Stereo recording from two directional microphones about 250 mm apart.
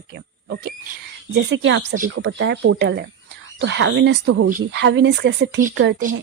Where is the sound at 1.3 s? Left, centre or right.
Right.